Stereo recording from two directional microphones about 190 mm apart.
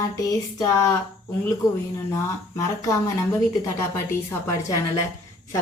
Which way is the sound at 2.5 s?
20° left (ahead or behind).